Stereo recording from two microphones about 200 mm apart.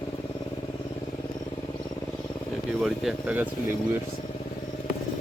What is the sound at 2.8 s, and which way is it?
Speech, 5° right (ahead or behind).